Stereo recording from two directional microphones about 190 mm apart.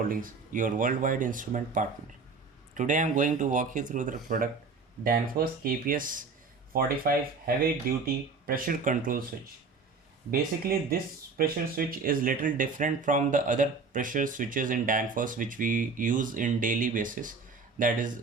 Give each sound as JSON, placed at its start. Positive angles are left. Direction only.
{"t": 0.1, "sound": "speech", "side_deg": -45}
{"t": 11.3, "sound": "speech", "side_deg": -50}